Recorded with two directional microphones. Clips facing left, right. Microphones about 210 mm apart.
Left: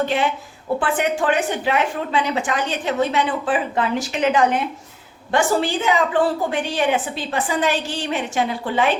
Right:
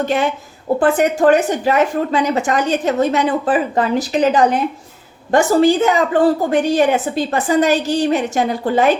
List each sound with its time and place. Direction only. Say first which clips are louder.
0.0 s a woman's voice: right 3 dB; 45° right (ahead or behind)